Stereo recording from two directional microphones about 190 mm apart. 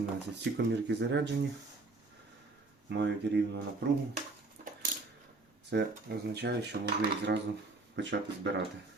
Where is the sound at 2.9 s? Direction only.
65° right (ahead or behind).